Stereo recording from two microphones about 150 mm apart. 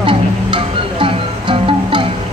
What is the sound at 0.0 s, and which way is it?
Music, 35° right (ahead or behind).